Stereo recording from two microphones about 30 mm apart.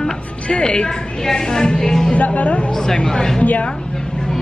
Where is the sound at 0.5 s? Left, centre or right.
Left.